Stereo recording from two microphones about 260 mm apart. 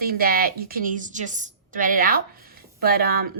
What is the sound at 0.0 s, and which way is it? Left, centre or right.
A woman's voice, right.